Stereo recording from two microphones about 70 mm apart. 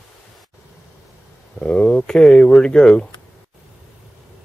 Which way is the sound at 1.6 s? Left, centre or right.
Centre.